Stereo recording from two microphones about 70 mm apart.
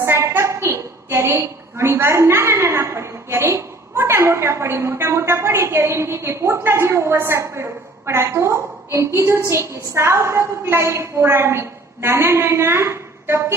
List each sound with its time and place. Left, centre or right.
0.0 s a woman's voice: right